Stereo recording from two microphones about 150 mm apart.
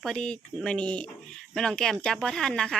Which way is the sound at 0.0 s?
5° left (ahead or behind).